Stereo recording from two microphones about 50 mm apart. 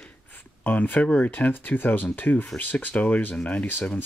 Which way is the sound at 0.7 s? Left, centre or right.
Left.